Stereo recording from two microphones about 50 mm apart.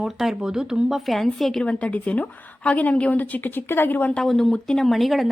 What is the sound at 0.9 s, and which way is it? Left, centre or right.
Speech, centre.